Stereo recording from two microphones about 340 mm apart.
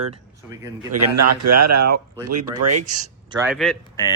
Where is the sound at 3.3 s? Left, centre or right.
Centre.